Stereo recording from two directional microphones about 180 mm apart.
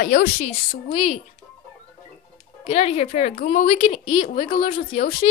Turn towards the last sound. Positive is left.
turn(degrees=35)  # may be behind; listen again after turning